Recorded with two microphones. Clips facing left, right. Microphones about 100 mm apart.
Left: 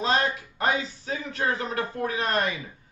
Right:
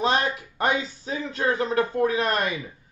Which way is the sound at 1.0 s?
30° right (ahead or behind).